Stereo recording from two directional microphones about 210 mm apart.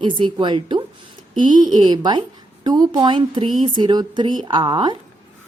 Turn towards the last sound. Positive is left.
turn(degrees=-20)  # may be behind; listen again after turning